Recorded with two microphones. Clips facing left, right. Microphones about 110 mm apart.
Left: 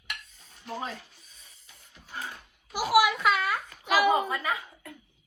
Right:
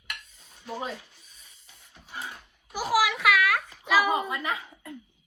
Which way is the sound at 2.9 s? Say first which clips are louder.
Left 1 dB; 90° right.